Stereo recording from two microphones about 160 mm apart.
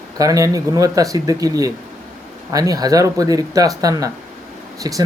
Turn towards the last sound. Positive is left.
turn(degrees=-25)  # may be behind; listen again after turning